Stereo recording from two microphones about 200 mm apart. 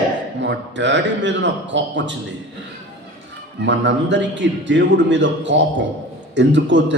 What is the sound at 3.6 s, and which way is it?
A man's voice, 65° right (ahead or behind).